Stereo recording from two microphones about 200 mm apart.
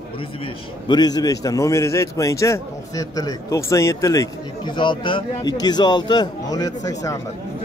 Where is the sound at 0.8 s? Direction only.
20° left (ahead or behind).